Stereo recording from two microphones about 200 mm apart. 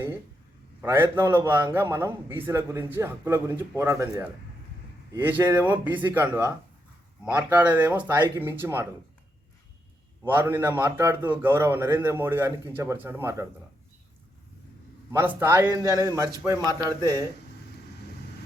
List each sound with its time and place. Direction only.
0.8 s a man's voice: 10° right (ahead or behind)
10.2 s a man's voice: 10° right (ahead or behind)
15.1 s a man's voice: 10° right (ahead or behind)